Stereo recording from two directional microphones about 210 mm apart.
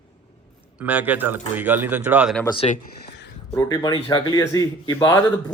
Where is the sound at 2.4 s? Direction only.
25° left (ahead or behind).